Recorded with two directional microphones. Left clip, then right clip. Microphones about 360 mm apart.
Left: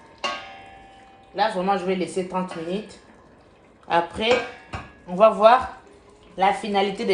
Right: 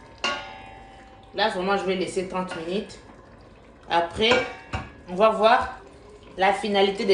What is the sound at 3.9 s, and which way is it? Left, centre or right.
Speech, centre.